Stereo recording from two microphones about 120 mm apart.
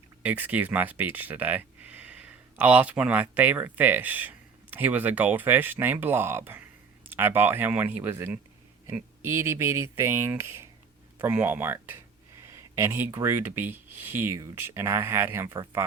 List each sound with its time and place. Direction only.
0.2 s speech: 15° right (ahead or behind)